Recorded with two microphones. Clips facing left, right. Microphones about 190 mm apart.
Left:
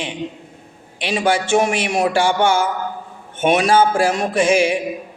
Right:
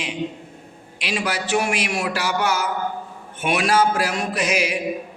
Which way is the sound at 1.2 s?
25° left (ahead or behind).